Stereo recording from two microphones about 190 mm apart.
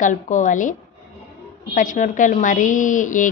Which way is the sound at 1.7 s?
40° left (ahead or behind).